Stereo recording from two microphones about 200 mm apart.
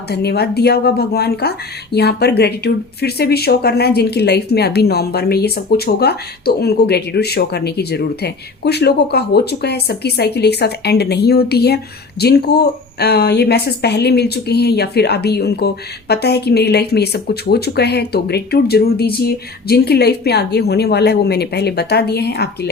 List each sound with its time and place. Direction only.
0.1 s speech: 55° left (ahead or behind)